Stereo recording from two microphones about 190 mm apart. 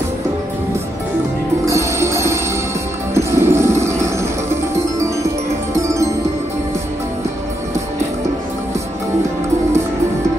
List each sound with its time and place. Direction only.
1.7 s music: 15° right (ahead or behind)
5.8 s music: 15° right (ahead or behind)